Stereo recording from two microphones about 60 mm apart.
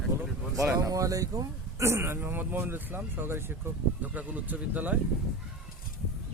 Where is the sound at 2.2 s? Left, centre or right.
Right.